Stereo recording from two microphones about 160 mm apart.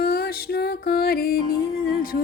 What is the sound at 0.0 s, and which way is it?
Music, 75° left (ahead or behind).